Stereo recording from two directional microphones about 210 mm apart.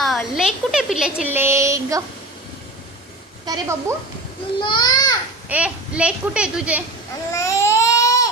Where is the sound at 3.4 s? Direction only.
15° right (ahead or behind).